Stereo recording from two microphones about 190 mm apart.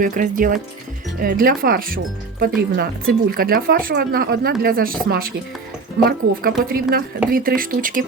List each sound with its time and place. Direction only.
0.0 s speech: 45° right (ahead or behind)